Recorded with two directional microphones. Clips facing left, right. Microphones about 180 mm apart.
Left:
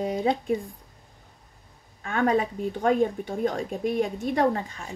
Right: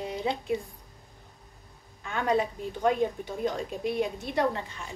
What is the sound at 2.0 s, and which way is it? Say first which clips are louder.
A woman's voice: left 3 dB; 55° left (ahead or behind).